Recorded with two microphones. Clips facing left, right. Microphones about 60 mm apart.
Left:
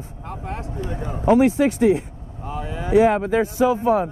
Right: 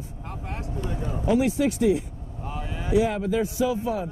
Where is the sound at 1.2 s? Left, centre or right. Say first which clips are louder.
Left 6 dB; left.